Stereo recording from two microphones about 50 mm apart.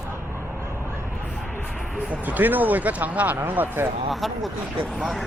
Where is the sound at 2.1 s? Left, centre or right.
Right.